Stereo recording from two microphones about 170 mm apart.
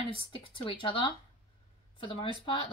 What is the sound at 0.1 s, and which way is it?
A woman's voice, 30° left (ahead or behind).